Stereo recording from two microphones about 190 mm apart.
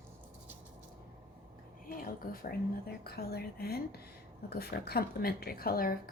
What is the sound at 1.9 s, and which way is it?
A woman's voice, 50° left (ahead or behind).